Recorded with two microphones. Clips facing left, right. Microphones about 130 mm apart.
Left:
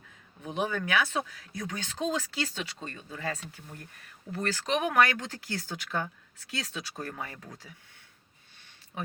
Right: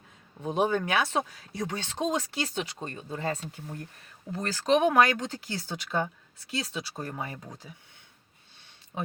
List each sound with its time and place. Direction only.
0.4 s speech: 30° right (ahead or behind)
2.9 s speech: 35° right (ahead or behind); by 7.7 s 15° right (ahead or behind)